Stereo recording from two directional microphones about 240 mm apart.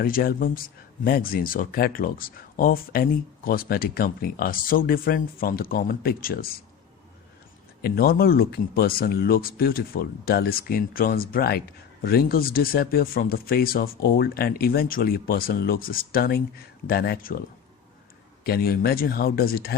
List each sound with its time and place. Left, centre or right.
0.0 s speech: left
7.8 s speech: left
18.4 s speech: left